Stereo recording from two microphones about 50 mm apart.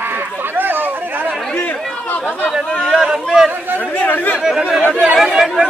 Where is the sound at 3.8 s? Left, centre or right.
Left.